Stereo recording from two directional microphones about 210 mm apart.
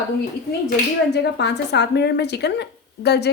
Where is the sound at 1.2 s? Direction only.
55° left (ahead or behind).